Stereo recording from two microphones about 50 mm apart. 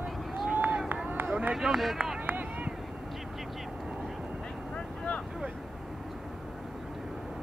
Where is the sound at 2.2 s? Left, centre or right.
Right.